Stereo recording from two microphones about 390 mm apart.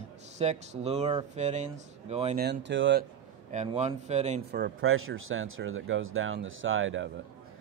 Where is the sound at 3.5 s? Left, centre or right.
Centre.